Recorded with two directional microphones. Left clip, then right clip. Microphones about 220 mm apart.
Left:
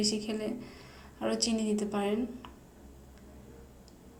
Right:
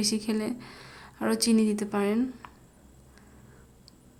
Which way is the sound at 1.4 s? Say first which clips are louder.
Right 9 dB; 50° right (ahead or behind).